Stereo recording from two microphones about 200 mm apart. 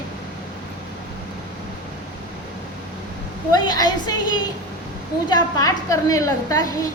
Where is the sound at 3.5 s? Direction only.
20° left (ahead or behind).